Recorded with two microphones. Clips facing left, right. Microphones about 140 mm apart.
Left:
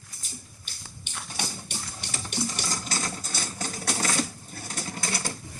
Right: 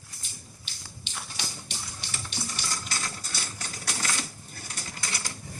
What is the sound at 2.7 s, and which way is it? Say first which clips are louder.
Sewing machine: left 4 dB; 40° left (ahead or behind).